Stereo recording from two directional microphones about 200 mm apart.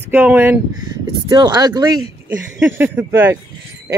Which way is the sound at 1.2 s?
20° right (ahead or behind).